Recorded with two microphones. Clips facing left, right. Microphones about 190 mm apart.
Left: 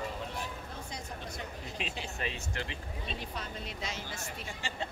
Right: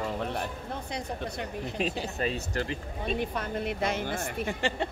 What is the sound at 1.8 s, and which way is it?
Speech, 40° right (ahead or behind).